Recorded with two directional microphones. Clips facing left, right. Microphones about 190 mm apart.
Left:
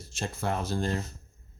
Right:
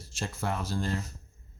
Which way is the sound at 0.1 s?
25° left (ahead or behind).